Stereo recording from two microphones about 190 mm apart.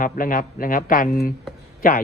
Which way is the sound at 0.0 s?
45° left (ahead or behind).